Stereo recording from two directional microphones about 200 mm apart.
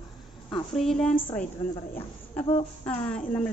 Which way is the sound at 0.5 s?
5° left (ahead or behind).